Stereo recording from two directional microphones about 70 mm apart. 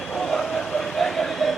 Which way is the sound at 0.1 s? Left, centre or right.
Centre.